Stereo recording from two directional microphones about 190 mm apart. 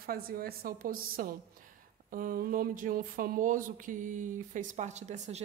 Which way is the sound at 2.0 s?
45° right (ahead or behind).